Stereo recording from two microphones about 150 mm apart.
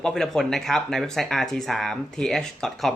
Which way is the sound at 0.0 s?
5° left (ahead or behind).